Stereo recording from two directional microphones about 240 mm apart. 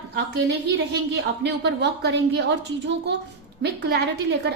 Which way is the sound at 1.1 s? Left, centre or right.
Right.